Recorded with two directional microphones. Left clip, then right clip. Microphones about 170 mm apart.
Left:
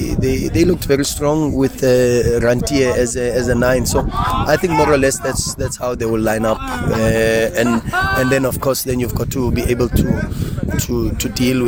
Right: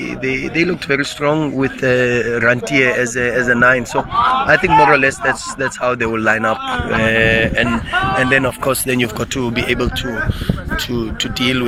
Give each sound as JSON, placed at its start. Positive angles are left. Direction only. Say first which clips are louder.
{"t": 0.2, "sound": "speech", "louder": "even", "side_deg": 50}
{"t": 1.3, "sound": "speech", "louder": "left 1 dB", "side_deg": 10}
{"t": 1.6, "sound": "a man's voice", "louder": "left 2 dB", "side_deg": 45}